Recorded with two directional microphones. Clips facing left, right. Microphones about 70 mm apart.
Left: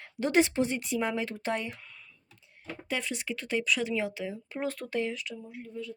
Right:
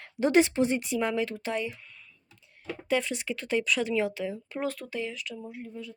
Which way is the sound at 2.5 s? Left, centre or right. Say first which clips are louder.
Right 6 dB; centre.